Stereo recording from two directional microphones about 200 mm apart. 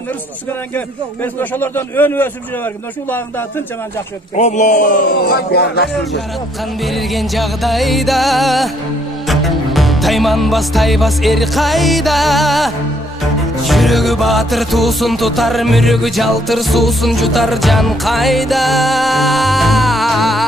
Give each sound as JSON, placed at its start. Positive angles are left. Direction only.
{"t": 0.7, "sound": "a man's voice", "side_deg": 10}
{"t": 4.4, "sound": "a man's voice", "side_deg": 35}
{"t": 6.8, "sound": "music", "side_deg": 0}